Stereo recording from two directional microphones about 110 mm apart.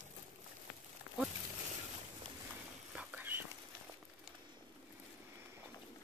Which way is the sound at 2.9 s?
15° right (ahead or behind).